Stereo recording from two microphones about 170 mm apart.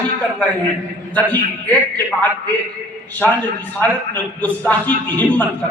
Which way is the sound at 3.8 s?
10° left (ahead or behind).